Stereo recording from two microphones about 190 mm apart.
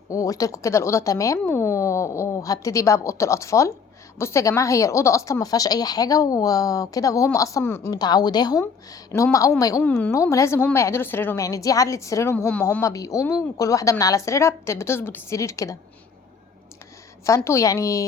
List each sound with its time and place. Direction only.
0.1 s speech: 15° left (ahead or behind)
17.2 s speech: 15° left (ahead or behind)